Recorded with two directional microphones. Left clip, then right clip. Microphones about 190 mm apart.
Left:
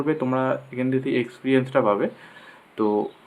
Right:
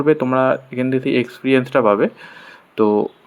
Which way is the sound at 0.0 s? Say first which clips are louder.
Right 8 dB; 30° right (ahead or behind).